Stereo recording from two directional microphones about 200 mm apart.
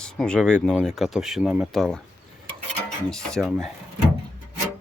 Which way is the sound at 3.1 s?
5° left (ahead or behind).